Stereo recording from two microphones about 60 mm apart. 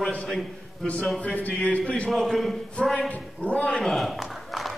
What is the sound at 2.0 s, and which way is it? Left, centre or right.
Speech, centre.